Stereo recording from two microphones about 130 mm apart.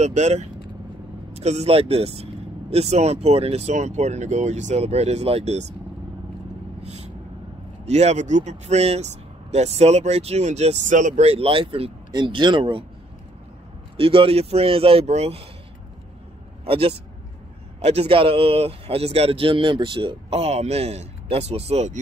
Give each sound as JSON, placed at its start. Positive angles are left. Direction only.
{"t": 0.0, "sound": "speech", "side_deg": -60}
{"t": 6.8, "sound": "vehicle", "side_deg": -55}
{"t": 7.8, "sound": "speech", "side_deg": -60}
{"t": 12.1, "sound": "speech", "side_deg": -35}
{"t": 13.9, "sound": "speech", "side_deg": -45}
{"t": 16.6, "sound": "speech", "side_deg": -45}